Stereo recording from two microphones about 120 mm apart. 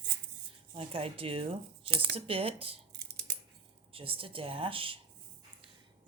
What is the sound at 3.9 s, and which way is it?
Speech, 50° right (ahead or behind).